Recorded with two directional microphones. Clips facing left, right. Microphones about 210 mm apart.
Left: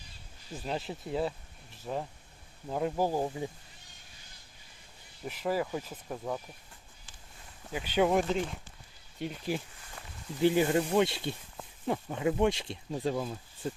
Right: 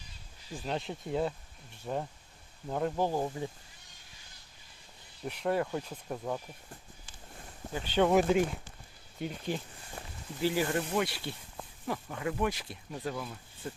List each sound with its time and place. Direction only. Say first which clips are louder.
0.5 s speech: even; 5° left (ahead or behind)
5.2 s speech: right 1 dB; centre (ahead or behind)
7.7 s speech: even; 10° left (ahead or behind)
8.1 s speech: right 3 dB; 10° right (ahead or behind)
9.1 s speech: left 1 dB; centre (ahead or behind)
10.4 s speech: left 5 dB; 20° left (ahead or behind)